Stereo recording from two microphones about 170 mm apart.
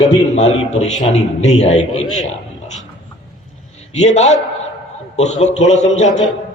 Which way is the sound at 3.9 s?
45° left (ahead or behind).